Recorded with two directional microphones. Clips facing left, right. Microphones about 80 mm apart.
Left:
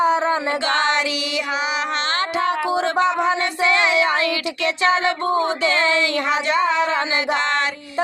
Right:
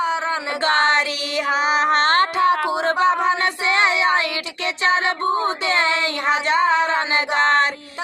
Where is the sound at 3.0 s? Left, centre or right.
Right.